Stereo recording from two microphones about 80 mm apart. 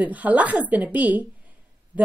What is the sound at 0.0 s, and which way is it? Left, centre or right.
A woman's voice, centre.